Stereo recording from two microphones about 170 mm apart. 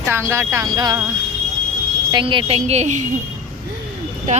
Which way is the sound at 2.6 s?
40° right (ahead or behind).